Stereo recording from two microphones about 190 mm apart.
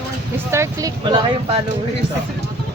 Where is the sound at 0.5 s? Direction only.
15° right (ahead or behind).